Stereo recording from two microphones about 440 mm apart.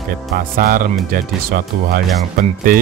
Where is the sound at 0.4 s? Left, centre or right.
Centre.